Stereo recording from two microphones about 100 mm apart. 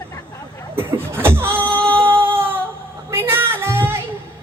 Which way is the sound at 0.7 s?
25° right (ahead or behind).